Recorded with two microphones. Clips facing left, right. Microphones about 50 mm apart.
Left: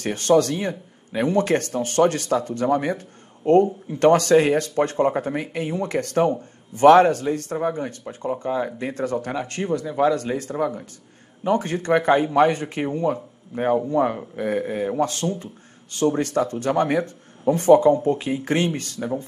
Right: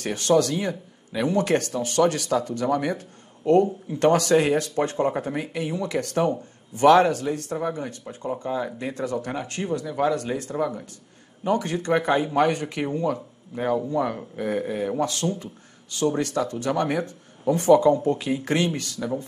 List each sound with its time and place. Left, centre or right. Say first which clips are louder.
0.0 s speech: left 2 dB; left